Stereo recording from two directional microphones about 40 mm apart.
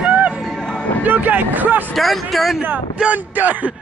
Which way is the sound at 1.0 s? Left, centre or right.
Right.